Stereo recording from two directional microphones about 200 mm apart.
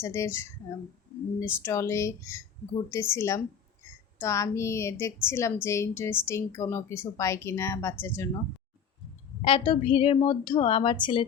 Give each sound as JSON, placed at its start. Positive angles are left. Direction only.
{"t": 0.0, "sound": "speech", "side_deg": 15}
{"t": 1.6, "sound": "speech", "side_deg": 15}
{"t": 9.4, "sound": "a woman's voice", "side_deg": 25}